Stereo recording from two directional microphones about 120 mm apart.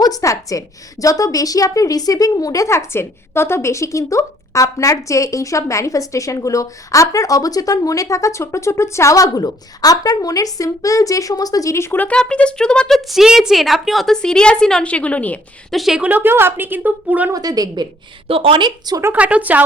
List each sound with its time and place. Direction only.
0.0 s a woman's voice: 30° left (ahead or behind); by 15.4 s 10° left (ahead or behind)
15.7 s a woman's voice: centre (ahead or behind)
17.3 s a woman's voice: 30° right (ahead or behind)
18.3 s a woman's voice: 50° right (ahead or behind)
18.9 s speech: 30° right (ahead or behind)
19.1 s a woman's voice: 10° right (ahead or behind)